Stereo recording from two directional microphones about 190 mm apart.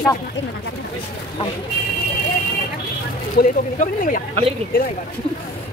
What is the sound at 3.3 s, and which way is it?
Speech, 45° left (ahead or behind).